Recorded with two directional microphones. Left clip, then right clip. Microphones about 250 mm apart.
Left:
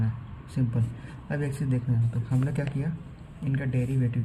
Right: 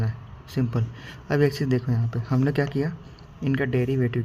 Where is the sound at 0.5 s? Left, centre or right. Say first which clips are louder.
Right 4 dB; right.